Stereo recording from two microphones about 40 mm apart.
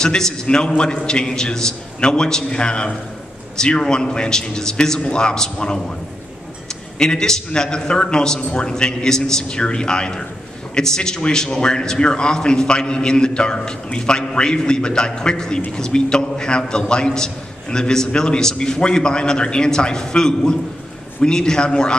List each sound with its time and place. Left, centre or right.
0.0 s a man's voice: centre
7.0 s a man's voice: centre